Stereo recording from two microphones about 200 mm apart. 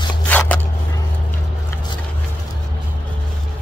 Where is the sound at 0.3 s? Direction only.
10° left (ahead or behind).